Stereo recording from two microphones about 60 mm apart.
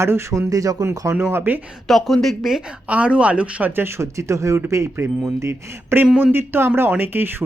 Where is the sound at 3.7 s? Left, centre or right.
Right.